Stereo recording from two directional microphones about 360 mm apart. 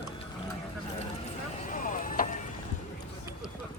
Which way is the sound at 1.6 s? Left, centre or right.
Left.